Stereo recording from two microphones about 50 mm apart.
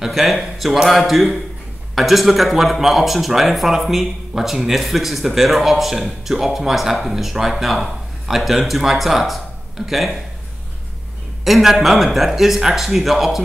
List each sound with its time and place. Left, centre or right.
0.0 s speech: centre
11.4 s speech: centre